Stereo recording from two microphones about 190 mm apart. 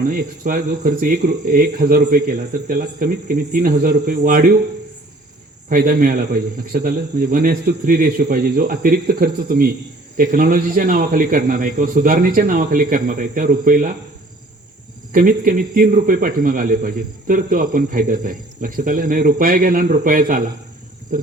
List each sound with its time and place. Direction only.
0.0 s speech: 45° right (ahead or behind)
5.6 s speech: 45° right (ahead or behind)
15.1 s speech: 45° right (ahead or behind)
21.1 s insect: 45° right (ahead or behind)